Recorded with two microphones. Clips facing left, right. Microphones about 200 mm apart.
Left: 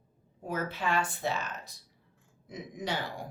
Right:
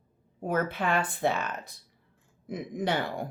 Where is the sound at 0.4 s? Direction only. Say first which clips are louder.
Right 5 dB; 55° right (ahead or behind).